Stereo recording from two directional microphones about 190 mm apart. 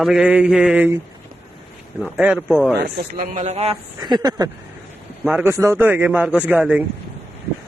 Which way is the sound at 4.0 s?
20° right (ahead or behind).